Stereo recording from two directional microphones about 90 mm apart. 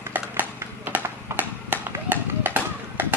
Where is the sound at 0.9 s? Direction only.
20° right (ahead or behind).